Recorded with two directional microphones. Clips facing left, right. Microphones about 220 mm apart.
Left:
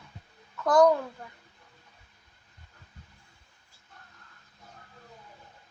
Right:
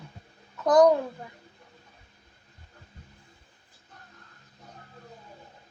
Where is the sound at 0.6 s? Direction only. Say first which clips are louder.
Right 2 dB; 20° right (ahead or behind).